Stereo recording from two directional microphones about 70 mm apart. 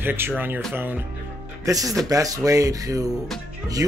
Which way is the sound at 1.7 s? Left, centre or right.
Right.